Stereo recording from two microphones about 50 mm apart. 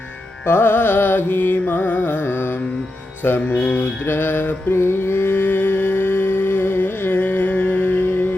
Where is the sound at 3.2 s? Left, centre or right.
Left.